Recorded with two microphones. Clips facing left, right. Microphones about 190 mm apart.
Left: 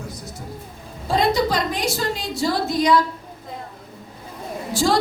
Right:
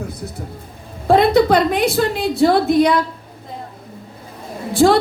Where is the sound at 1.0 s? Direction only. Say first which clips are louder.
Right 7 dB; 60° right (ahead or behind).